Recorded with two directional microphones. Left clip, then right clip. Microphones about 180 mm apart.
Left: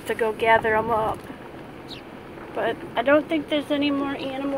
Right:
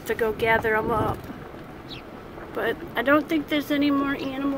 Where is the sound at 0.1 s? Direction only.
5° right (ahead or behind).